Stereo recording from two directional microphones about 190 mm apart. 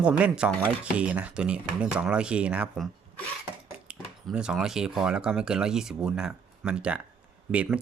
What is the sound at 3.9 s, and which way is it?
Speech, 5° right (ahead or behind).